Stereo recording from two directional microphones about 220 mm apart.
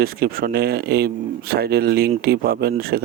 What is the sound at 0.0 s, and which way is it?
Speech, 45° right (ahead or behind).